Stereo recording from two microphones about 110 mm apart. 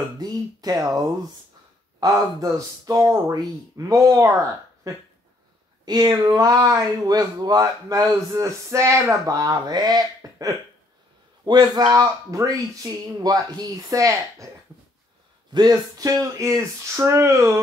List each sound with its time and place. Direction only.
0.2 s speech: 35° right (ahead or behind)
15.5 s speech: 40° right (ahead or behind)